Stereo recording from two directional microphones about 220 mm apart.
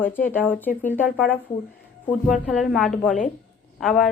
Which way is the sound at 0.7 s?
35° left (ahead or behind).